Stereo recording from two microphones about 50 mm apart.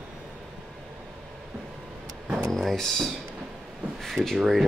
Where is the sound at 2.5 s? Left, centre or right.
Centre.